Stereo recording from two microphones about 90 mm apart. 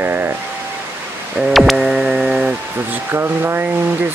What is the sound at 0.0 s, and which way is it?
Pink noise, 20° right (ahead or behind).